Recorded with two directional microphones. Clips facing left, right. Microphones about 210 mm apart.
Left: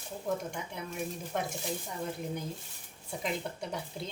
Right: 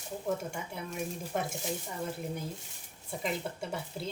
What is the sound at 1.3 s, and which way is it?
Speech, 5° right (ahead or behind).